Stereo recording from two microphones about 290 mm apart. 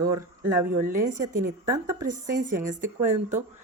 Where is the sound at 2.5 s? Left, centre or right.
Right.